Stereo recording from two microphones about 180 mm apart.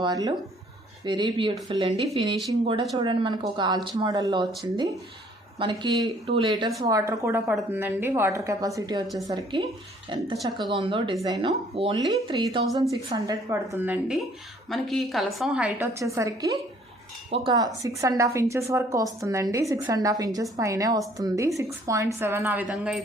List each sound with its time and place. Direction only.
0.0 s a woman's voice: 20° right (ahead or behind)
10.3 s a woman's voice: centre (ahead or behind)
10.7 s speech: 30° right (ahead or behind)
11.7 s a woman's voice: 30° right (ahead or behind); by 23.0 s 5° right (ahead or behind)